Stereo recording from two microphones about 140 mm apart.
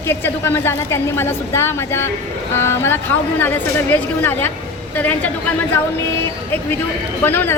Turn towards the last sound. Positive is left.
turn(degrees=15)  # may be behind; listen again after turning